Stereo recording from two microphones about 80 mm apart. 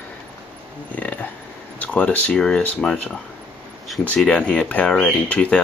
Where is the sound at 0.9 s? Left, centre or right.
Centre.